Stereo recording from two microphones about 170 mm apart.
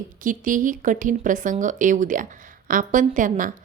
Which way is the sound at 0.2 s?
50° right (ahead or behind).